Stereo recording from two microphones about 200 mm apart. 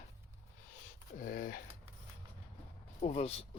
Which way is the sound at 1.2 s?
45° left (ahead or behind).